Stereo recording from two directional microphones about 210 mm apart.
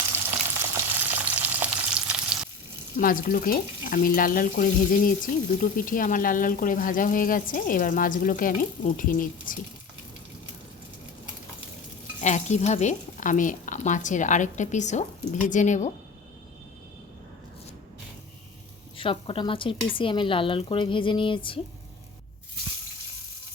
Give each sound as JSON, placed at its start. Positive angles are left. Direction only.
{"t": 0.1, "sound": "frying", "side_deg": -10}
{"t": 3.0, "sound": "speech", "side_deg": 40}
{"t": 12.2, "sound": "speech", "side_deg": 35}
{"t": 18.9, "sound": "speech", "side_deg": 25}